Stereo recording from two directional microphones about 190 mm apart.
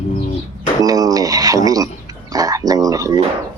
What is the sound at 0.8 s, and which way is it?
Speech, 20° right (ahead or behind).